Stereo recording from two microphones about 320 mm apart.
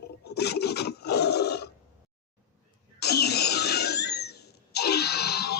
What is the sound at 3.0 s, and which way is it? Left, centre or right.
Cough, left.